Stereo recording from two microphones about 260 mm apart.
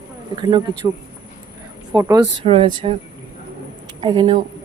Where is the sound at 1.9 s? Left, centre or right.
Centre.